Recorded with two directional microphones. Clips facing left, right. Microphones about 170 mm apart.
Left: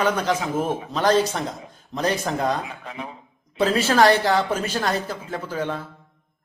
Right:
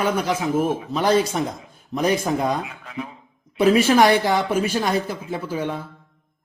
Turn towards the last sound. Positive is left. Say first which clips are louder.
# right 1 dB
turn(degrees=-10)  # may be behind; listen again after turning